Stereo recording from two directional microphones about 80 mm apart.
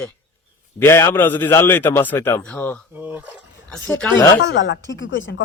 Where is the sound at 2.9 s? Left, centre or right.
Right.